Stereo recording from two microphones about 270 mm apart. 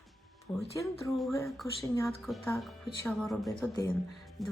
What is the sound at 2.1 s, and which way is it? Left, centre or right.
Speech, centre.